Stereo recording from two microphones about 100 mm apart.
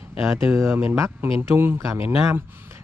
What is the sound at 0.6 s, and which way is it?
Speech, 25° right (ahead or behind).